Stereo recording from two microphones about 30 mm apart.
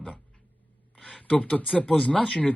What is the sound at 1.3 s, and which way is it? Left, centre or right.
Speech, left.